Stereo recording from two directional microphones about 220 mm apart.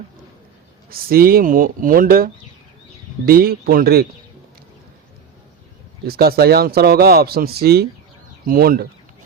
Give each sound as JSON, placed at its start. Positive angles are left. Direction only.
{"t": 0.9, "sound": "speech", "side_deg": -40}
{"t": 6.1, "sound": "speech", "side_deg": -45}